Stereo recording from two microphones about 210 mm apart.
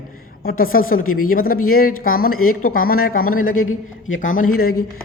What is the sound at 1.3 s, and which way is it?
Speech, 45° left (ahead or behind).